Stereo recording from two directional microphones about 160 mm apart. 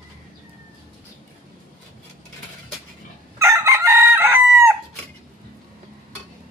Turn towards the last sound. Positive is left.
turn(degrees=-15)  # may be behind; listen again after turning